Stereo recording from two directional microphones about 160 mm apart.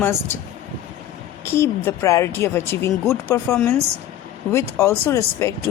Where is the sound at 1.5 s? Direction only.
15° left (ahead or behind).